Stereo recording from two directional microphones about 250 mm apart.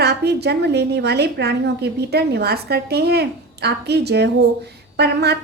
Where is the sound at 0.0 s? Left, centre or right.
Right.